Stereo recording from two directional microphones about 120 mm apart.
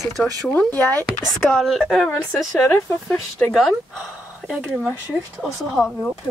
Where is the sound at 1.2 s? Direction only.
Centre (ahead or behind).